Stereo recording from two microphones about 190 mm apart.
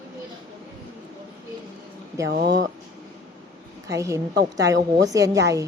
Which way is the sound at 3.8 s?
15° right (ahead or behind).